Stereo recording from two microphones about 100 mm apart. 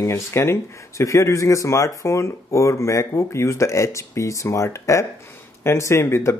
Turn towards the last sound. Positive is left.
turn(degrees=25)  # may be behind; listen again after turning